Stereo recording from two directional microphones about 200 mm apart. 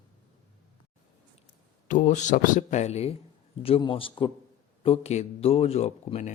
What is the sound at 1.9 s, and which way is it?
Speech, 40° left (ahead or behind).